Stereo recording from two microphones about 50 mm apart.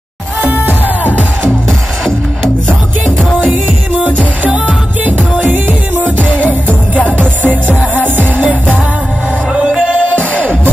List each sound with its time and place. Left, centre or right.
0.7 s music: left
4.0 s music: right
6.1 s music: left